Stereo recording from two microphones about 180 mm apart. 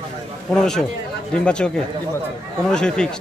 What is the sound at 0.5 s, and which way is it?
A man's voice, 5° left (ahead or behind).